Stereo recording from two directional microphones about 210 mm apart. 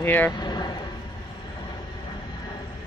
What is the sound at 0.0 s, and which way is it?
Speech, 10° left (ahead or behind).